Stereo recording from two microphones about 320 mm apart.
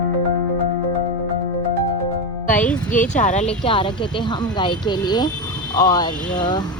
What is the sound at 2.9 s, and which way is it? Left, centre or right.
Speech, left.